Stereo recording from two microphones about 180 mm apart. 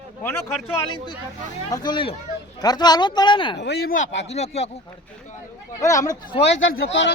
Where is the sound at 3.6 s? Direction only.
65° left (ahead or behind).